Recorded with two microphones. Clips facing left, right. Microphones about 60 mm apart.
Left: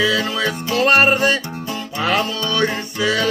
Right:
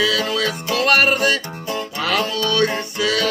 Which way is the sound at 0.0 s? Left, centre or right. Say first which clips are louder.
Left 1 dB; left.